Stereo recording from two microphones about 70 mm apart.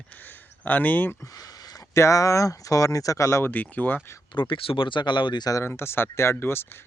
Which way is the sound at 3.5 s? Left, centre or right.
Left.